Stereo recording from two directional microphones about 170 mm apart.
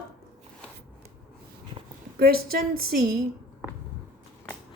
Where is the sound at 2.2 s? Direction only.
65° right (ahead or behind).